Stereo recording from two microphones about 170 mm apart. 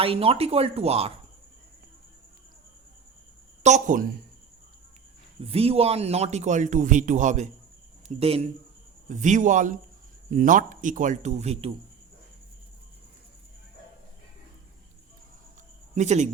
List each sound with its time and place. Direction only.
0.0 s a man's voice: 35° right (ahead or behind)
3.6 s speech: 45° right (ahead or behind)
5.4 s a man's voice: 35° right (ahead or behind)
16.0 s speech: 45° right (ahead or behind)